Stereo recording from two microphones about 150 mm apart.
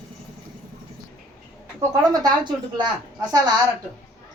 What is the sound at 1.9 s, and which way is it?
Speech, 25° right (ahead or behind).